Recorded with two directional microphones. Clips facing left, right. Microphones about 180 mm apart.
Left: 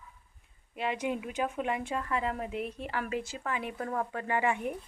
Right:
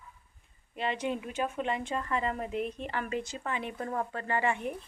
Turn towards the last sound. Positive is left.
turn(degrees=15)  # may be behind; listen again after turning